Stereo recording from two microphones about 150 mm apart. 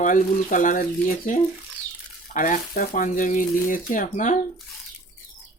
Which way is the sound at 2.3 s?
60° left (ahead or behind).